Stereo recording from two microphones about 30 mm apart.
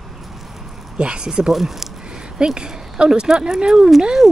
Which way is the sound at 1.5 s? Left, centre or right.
Centre.